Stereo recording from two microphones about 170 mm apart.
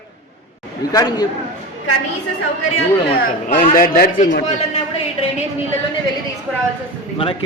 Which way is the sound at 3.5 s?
55° left (ahead or behind).